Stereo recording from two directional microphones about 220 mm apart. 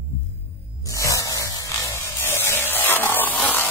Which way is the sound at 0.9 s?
15° left (ahead or behind).